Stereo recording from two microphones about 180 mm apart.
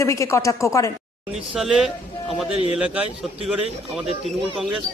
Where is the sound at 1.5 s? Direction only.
5° right (ahead or behind).